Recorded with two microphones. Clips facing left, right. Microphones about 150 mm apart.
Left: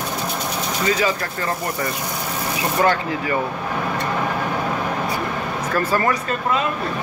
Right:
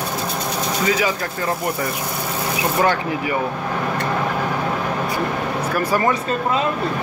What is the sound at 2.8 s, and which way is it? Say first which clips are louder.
Speech: left 1 dB; 10° right (ahead or behind).